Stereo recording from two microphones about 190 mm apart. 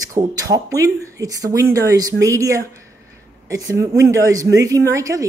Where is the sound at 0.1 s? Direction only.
15° right (ahead or behind).